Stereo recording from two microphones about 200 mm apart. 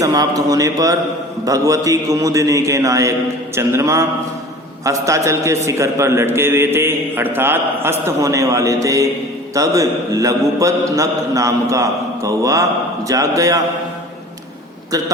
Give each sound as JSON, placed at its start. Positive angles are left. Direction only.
{"t": 0.0, "sound": "a man's voice", "side_deg": -15}